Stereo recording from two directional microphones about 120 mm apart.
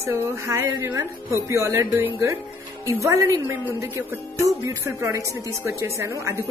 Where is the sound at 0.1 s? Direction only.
20° right (ahead or behind).